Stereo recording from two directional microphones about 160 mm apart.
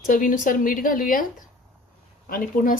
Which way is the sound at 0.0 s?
55° left (ahead or behind).